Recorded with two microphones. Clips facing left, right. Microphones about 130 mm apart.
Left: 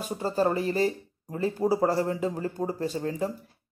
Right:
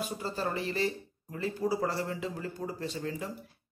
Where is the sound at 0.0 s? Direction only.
35° left (ahead or behind).